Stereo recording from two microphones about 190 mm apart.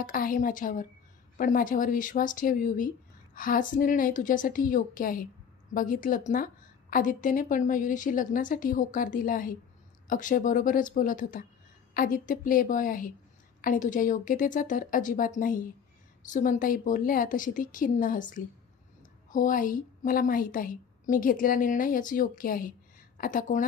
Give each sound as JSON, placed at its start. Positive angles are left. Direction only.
{"t": 0.0, "sound": "a woman's voice", "side_deg": 45}